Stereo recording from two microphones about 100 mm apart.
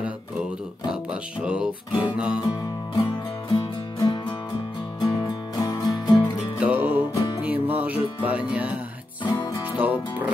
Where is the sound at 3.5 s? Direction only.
50° left (ahead or behind).